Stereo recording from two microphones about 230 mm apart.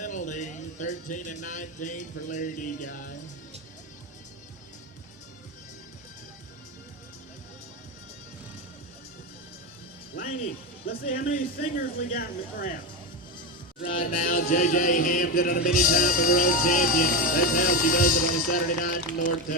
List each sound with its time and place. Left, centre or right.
0.0 s speech: left
10.2 s music: left
10.8 s chant: left
13.8 s chant: left